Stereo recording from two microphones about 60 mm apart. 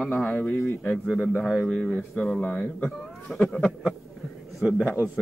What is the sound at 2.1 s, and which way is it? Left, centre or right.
Speech, centre.